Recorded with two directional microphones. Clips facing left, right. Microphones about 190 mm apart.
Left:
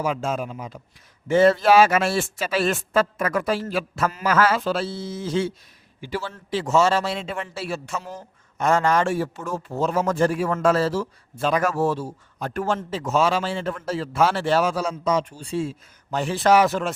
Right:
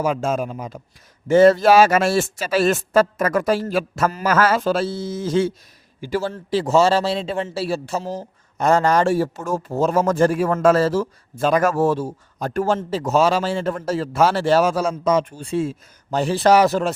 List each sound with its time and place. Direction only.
0.0 s a man's voice: 45° right (ahead or behind)
16.0 s a man's voice: 35° right (ahead or behind)